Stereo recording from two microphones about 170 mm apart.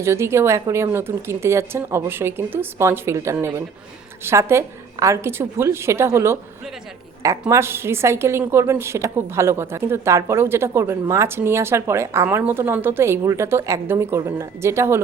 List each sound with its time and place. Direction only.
0.0 s a woman's voice: 15° right (ahead or behind)